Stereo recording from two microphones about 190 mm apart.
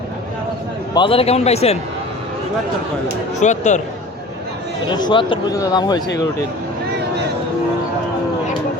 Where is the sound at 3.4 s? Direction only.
40° left (ahead or behind).